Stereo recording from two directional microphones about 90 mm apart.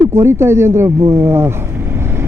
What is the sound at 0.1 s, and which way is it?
Speech, 30° right (ahead or behind).